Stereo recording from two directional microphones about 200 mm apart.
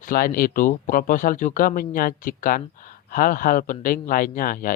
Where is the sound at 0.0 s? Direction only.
45° left (ahead or behind).